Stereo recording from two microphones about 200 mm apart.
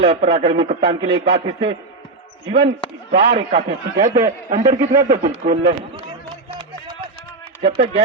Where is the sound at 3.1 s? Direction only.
55° right (ahead or behind).